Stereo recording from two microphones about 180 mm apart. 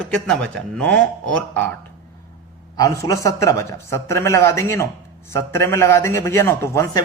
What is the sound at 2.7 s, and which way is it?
A man's voice, 20° left (ahead or behind).